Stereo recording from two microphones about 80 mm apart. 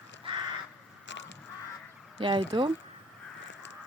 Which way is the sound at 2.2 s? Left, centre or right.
Right.